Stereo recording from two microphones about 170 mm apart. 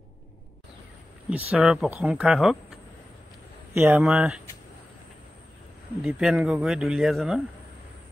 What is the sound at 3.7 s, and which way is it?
Speech, 15° right (ahead or behind).